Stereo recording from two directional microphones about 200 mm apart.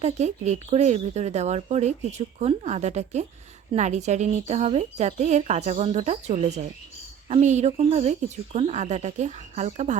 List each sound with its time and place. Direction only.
0.0 s speech: 35° right (ahead or behind)